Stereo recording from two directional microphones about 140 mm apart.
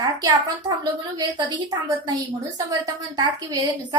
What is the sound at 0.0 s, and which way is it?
Speech, 25° right (ahead or behind).